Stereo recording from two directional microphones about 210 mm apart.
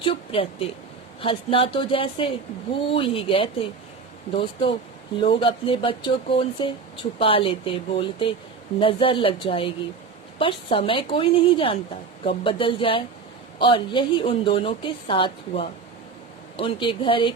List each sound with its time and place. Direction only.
0.0 s a woman's voice: 25° left (ahead or behind)
5.2 s a woman's voice: 25° left (ahead or behind)